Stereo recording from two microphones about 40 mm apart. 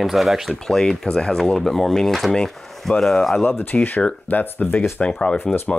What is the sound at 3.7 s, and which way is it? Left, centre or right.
Speech, left.